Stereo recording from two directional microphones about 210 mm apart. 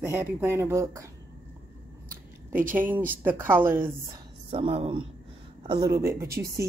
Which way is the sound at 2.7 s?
10° right (ahead or behind).